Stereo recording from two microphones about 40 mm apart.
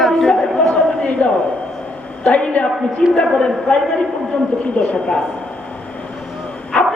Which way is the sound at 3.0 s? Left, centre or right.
Centre.